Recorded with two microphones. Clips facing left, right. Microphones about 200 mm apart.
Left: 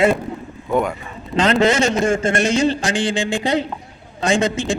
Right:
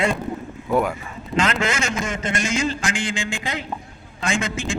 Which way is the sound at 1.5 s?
35° left (ahead or behind).